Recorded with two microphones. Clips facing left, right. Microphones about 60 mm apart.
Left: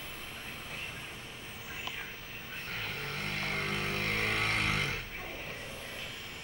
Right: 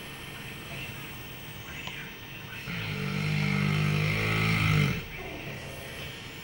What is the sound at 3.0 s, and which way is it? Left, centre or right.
Vehicle, centre.